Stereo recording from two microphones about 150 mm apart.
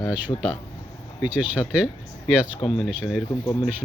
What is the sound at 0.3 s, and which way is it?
Speech, 30° left (ahead or behind).